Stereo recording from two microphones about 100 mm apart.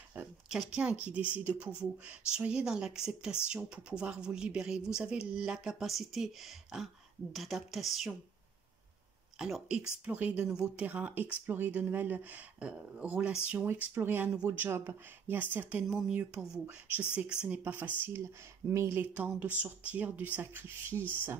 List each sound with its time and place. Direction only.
0.7 s speech: 15° right (ahead or behind)
9.4 s speech: 5° right (ahead or behind); by 19.0 s 30° right (ahead or behind)
19.1 s speech: 15° right (ahead or behind)